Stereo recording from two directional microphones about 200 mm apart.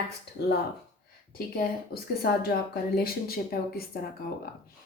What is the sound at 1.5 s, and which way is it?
Speech, 50° left (ahead or behind).